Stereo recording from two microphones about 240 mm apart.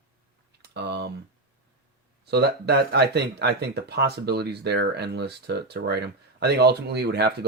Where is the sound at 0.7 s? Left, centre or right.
Right.